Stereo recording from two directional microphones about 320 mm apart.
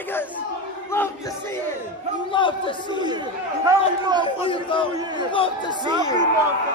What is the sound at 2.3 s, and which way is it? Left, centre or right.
Speech, centre.